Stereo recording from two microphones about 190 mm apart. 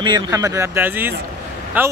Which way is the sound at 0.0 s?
20° right (ahead or behind).